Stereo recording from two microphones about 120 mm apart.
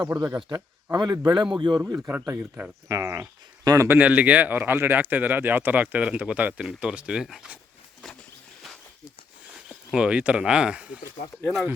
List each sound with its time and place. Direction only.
0.0 s speech: 30° right (ahead or behind)
0.3 s speech: 40° right (ahead or behind)
2.0 s speech: 20° right (ahead or behind)
9.9 s speech: 10° right (ahead or behind)